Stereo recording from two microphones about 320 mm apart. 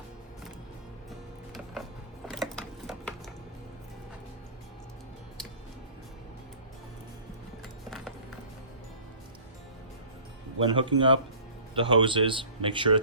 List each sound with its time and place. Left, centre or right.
2.2 s a sound: centre
7.9 s music: centre
10.7 s a man's voice: centre